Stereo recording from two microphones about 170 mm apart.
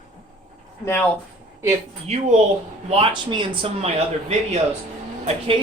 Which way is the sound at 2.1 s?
40° right (ahead or behind).